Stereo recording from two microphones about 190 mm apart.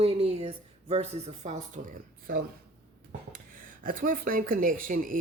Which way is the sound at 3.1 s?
45° right (ahead or behind).